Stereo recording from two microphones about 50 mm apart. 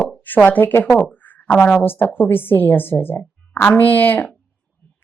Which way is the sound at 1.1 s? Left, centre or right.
Left.